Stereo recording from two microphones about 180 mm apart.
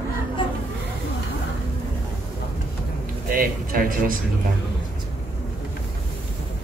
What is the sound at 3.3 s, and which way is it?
Speech, 55° right (ahead or behind).